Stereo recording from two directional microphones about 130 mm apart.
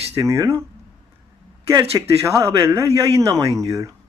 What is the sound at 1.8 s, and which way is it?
Speech, 20° right (ahead or behind).